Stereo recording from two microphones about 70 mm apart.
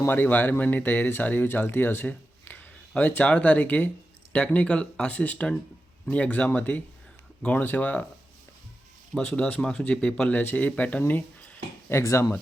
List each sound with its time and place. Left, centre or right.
0.1 s speech: left
9.1 s speech: centre
10.3 s speech: left
11.9 s speech: left